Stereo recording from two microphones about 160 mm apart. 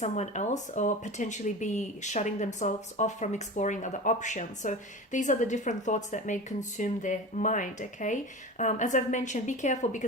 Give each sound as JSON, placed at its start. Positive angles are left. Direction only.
{"t": 0.0, "sound": "speech", "side_deg": 45}